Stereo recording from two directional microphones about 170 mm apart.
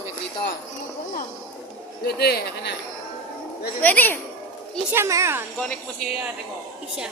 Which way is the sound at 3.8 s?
10° left (ahead or behind).